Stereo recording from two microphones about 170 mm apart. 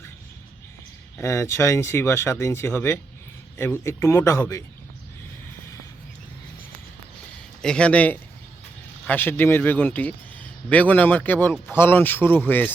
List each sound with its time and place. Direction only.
1.2 s speech: 15° left (ahead or behind)
7.6 s speech: 5° left (ahead or behind)